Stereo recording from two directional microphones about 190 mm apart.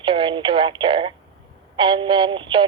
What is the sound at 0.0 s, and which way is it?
A woman's voice, 25° right (ahead or behind).